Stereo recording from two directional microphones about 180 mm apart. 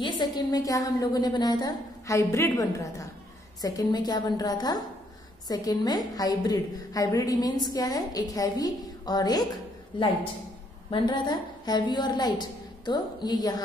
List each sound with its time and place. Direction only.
0.0 s a woman's voice: 20° left (ahead or behind)
10.9 s a woman's voice: 25° left (ahead or behind)